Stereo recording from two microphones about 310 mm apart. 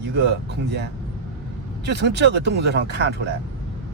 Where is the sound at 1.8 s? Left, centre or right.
Right.